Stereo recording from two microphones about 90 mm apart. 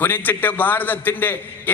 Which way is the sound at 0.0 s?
20° left (ahead or behind).